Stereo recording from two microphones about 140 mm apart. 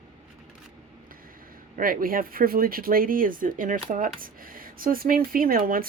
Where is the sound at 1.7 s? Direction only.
90° right.